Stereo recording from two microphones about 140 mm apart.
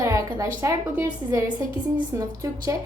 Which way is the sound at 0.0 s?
20° right (ahead or behind).